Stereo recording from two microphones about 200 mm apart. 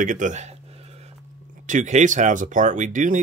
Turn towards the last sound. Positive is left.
turn(degrees=-40)  # may be behind; listen again after turning